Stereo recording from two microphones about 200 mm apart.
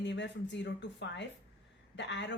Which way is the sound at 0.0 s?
60° left (ahead or behind).